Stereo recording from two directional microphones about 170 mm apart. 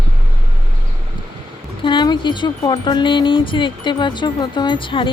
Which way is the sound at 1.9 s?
25° left (ahead or behind).